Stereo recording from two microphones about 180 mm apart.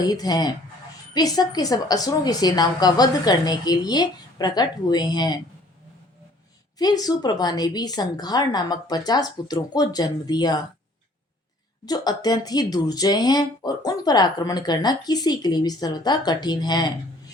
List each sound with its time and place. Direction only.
0.0 s speech: 20° left (ahead or behind)
6.7 s speech: 20° left (ahead or behind)
11.9 s speech: 20° left (ahead or behind)